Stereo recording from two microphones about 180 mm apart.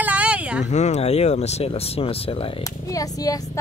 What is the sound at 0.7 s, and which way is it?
Speech, 40° left (ahead or behind).